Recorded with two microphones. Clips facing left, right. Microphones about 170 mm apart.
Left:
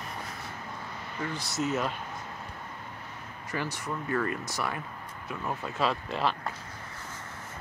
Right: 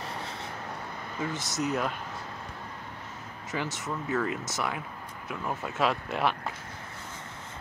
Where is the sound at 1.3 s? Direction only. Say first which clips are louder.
Right 1 dB; 20° right (ahead or behind).